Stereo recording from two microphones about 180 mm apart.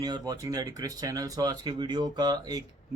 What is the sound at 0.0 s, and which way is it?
Speech, 20° right (ahead or behind).